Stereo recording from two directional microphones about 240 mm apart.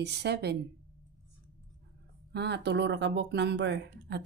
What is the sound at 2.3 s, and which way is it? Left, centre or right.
Speech, right.